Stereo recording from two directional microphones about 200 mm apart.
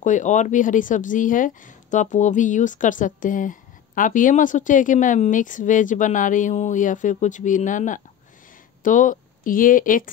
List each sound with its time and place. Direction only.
0.0 s a woman's voice: 40° left (ahead or behind)